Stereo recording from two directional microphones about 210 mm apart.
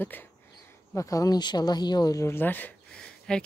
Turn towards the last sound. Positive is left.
turn(degrees=5)  # may be behind; listen again after turning